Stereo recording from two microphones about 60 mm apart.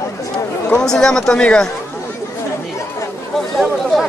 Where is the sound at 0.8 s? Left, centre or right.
Centre.